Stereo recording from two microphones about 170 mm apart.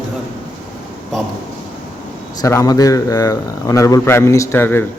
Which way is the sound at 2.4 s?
20° left (ahead or behind).